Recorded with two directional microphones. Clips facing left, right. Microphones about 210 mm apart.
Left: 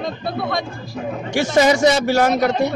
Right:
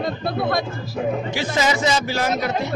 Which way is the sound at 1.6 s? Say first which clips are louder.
Left 7 dB; 55° left (ahead or behind).